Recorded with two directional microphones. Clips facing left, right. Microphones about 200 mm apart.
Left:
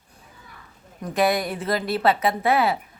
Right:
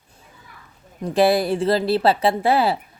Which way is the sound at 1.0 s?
30° right (ahead or behind).